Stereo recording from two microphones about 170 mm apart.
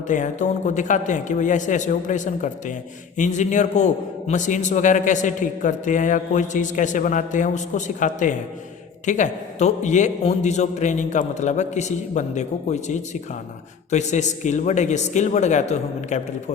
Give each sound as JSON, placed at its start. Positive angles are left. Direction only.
{"t": 0.1, "sound": "a man's voice", "side_deg": 45}